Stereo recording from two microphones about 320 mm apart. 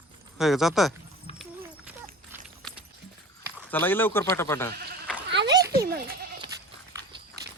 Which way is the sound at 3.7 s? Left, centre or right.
Centre.